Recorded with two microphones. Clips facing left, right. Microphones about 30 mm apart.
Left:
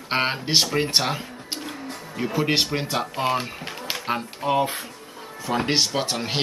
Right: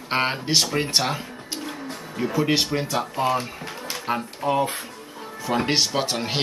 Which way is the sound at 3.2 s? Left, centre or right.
Left.